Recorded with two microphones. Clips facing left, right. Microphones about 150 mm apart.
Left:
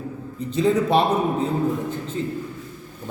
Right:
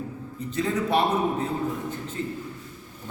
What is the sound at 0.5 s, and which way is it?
Speech, 25° left (ahead or behind).